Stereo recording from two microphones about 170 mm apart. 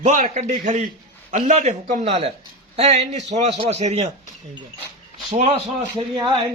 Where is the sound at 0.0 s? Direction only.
45° right (ahead or behind).